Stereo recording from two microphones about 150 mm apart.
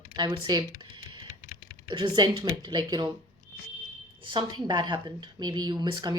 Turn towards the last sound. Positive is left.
turn(degrees=-30)  # may be behind; listen again after turning